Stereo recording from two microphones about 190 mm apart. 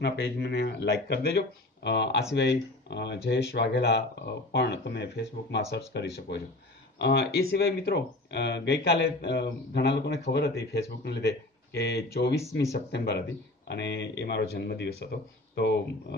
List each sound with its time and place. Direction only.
0.0 s speech: 60° left (ahead or behind)